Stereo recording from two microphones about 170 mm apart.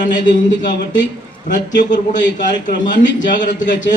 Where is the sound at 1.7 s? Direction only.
90° left.